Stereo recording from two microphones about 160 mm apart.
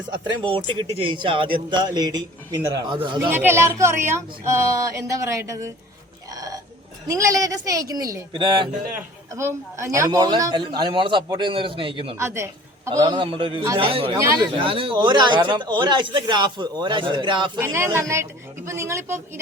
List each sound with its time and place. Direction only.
0.1 s a man's voice: 30° right (ahead or behind)
3.3 s speech: 15° right (ahead or behind)
6.3 s burping: 20° right (ahead or behind)
7.1 s a man's voice: 20° right (ahead or behind)
8.9 s a man's voice: 15° right (ahead or behind); by 12.1 s 35° right (ahead or behind)
12.1 s a woman's voice: 15° right (ahead or behind)
13.0 s a man's voice: 30° right (ahead or behind)
14.2 s speech: 15° right (ahead or behind)
14.5 s a man's voice: 35° right (ahead or behind)
17.6 s speech: 15° right (ahead or behind)